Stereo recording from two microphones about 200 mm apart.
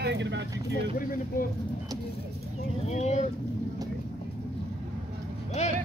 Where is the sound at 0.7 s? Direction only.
45° left (ahead or behind).